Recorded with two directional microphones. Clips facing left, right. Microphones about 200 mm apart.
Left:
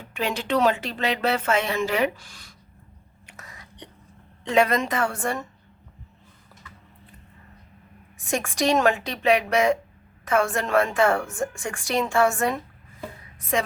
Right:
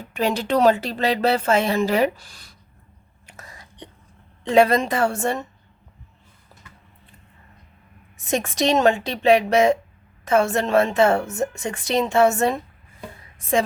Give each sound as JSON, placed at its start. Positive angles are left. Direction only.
{"t": 0.1, "sound": "speech", "side_deg": -40}
{"t": 3.2, "sound": "a sound", "side_deg": -30}
{"t": 4.4, "sound": "speech", "side_deg": -30}
{"t": 8.2, "sound": "a woman's voice", "side_deg": -20}